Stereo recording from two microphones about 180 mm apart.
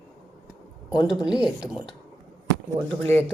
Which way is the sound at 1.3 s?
5° right (ahead or behind).